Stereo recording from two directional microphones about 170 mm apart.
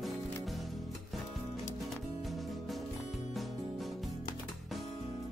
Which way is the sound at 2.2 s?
Centre (ahead or behind).